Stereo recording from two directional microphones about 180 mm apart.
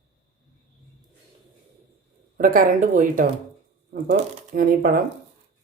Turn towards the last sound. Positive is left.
turn(degrees=-50)  # may be behind; listen again after turning